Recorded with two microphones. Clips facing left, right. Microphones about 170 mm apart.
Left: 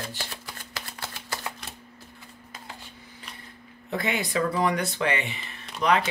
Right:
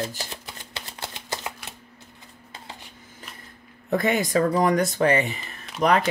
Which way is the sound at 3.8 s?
45° right (ahead or behind).